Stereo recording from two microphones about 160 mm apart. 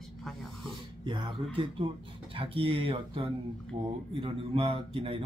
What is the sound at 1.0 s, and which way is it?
A man's voice, 30° right (ahead or behind).